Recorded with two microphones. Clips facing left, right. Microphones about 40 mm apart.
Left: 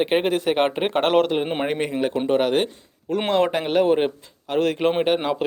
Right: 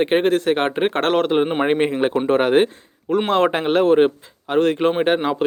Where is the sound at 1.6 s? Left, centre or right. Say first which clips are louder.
Right 5 dB; right.